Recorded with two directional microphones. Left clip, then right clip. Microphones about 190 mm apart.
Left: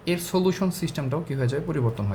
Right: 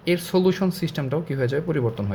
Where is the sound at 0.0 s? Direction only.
20° right (ahead or behind).